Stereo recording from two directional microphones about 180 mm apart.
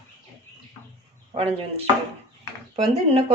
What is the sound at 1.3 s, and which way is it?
Speech, 30° right (ahead or behind).